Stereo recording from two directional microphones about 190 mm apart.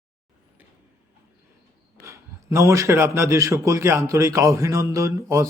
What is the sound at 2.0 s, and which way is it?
A man's voice, 15° right (ahead or behind).